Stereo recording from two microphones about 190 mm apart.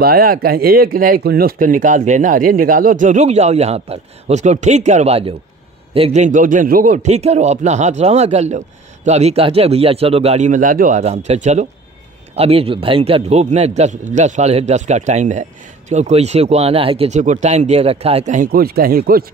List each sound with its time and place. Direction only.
0.0 s a man's voice: 50° right (ahead or behind)